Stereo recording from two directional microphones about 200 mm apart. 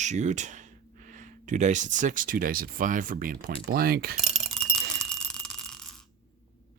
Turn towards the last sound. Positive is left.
turn(degrees=5)  # may be behind; listen again after turning